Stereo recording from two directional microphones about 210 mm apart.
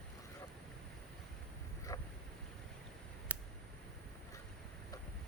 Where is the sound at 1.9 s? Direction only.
15° left (ahead or behind).